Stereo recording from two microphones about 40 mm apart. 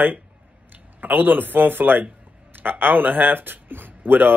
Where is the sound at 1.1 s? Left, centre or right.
Right.